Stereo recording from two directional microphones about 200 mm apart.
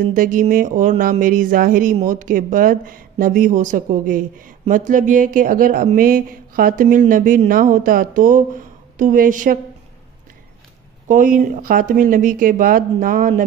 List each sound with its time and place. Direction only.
0.0 s speech: 40° right (ahead or behind)
11.1 s speech: 40° right (ahead or behind)